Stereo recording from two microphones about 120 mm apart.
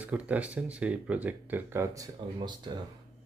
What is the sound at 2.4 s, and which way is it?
Speech, 40° right (ahead or behind).